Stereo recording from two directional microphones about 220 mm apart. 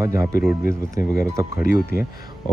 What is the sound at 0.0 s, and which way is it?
Speech, 15° right (ahead or behind).